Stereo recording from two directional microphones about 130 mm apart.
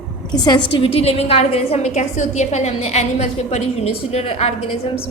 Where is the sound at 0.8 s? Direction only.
50° left (ahead or behind).